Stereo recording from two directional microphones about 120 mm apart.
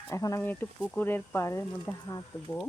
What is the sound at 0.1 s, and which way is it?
Speech, 25° left (ahead or behind).